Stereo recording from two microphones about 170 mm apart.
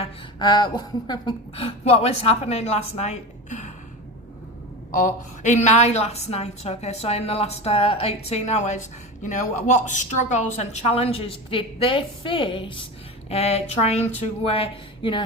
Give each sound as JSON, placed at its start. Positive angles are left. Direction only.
{"t": 0.0, "sound": "a woman's voice", "side_deg": 25}
{"t": 4.9, "sound": "a woman's voice", "side_deg": 50}